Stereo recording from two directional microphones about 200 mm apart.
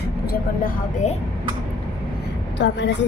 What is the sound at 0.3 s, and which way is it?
Speech, 45° left (ahead or behind).